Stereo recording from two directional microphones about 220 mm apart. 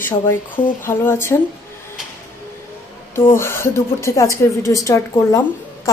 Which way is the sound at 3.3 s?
10° left (ahead or behind).